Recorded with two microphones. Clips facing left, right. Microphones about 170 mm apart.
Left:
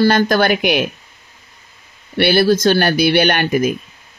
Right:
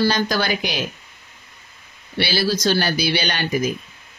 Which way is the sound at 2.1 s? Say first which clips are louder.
Left 8 dB; 55° left (ahead or behind).